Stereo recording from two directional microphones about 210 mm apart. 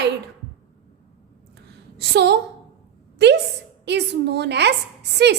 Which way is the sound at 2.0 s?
55° right (ahead or behind).